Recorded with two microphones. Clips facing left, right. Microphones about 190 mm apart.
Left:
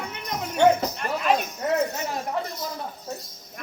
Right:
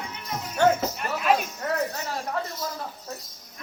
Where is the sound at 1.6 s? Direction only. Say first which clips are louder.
Left 4 dB; 20° left (ahead or behind).